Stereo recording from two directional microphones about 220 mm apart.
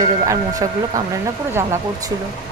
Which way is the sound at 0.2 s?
15° right (ahead or behind).